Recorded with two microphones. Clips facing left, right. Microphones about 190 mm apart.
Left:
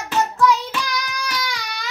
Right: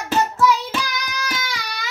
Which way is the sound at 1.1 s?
Centre (ahead or behind).